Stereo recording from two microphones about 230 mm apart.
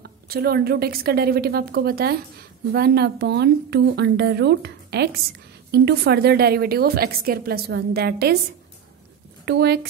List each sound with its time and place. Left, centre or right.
0.0 s a woman's voice: right
9.5 s a woman's voice: right